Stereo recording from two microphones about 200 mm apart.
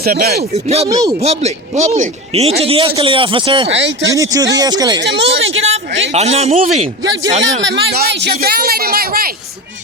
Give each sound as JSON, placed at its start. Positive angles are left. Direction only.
{"t": 0.0, "sound": "speech", "side_deg": -50}
{"t": 0.5, "sound": "speech", "side_deg": -30}
{"t": 0.9, "sound": "a man's voice", "side_deg": -20}
{"t": 1.2, "sound": "a man's voice", "side_deg": -30}
{"t": 3.7, "sound": "speech", "side_deg": -65}
{"t": 4.1, "sound": "a man's voice", "side_deg": -15}
{"t": 5.1, "sound": "speech", "side_deg": -75}
{"t": 6.1, "sound": "speech", "side_deg": -30}
{"t": 7.6, "sound": "speech", "side_deg": -60}